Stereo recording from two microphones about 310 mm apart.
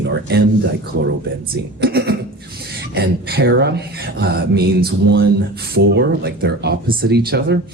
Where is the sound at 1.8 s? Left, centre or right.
Right.